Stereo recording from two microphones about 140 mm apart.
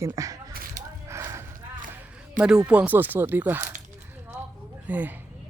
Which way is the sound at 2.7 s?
10° right (ahead or behind).